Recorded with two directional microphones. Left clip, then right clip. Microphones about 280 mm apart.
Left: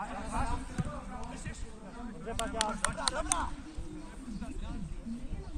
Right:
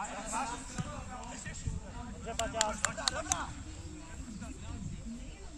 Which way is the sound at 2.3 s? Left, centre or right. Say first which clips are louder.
Even; right.